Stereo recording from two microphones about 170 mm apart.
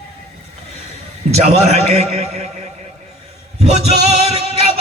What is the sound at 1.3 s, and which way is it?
A man's voice, 40° right (ahead or behind).